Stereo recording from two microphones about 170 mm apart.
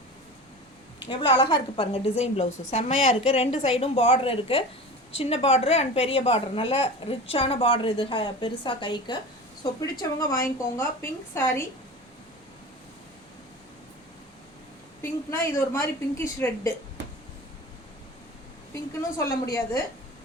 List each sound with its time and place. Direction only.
1.7 s a woman's voice: 30° left (ahead or behind); by 11.6 s 15° left (ahead or behind)
15.0 s a woman's voice: 15° left (ahead or behind)
18.7 s a woman's voice: 20° left (ahead or behind)